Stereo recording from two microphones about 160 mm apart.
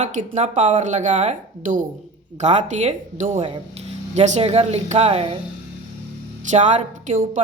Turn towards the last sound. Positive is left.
turn(degrees=-50)  # may be behind; listen again after turning